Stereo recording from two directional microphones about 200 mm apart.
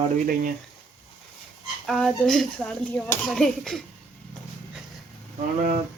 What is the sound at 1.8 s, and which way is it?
Speech, centre (ahead or behind).